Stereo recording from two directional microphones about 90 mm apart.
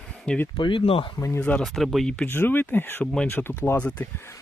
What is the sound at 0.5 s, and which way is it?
Speech, 80° left.